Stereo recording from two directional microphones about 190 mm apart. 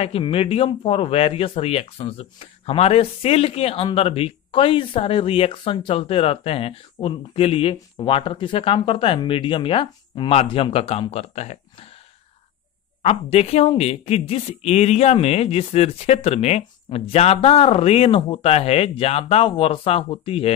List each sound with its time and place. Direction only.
0.0 s speech: 30° left (ahead or behind)
13.0 s speech: 30° left (ahead or behind)